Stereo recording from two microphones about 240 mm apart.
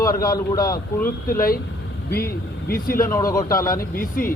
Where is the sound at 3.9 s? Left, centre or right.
Left.